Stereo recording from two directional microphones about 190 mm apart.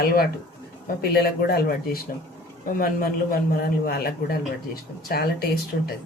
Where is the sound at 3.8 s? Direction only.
50° left (ahead or behind).